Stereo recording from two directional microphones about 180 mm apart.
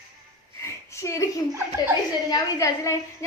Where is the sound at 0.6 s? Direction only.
15° left (ahead or behind).